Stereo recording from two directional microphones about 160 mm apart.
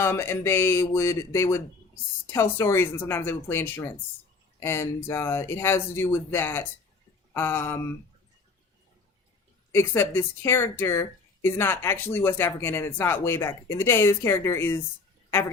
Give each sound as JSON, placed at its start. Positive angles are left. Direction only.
{"t": 0.0, "sound": "speech", "side_deg": 15}
{"t": 9.7, "sound": "speech", "side_deg": 15}